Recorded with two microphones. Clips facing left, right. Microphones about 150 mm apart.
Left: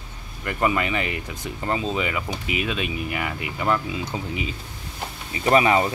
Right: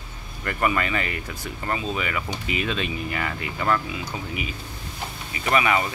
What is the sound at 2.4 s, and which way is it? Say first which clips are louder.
Speech: even; 10° left (ahead or behind).